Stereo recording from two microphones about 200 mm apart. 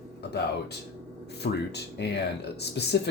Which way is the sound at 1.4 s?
55° left (ahead or behind).